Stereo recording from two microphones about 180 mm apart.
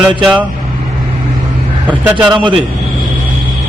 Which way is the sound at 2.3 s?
25° right (ahead or behind).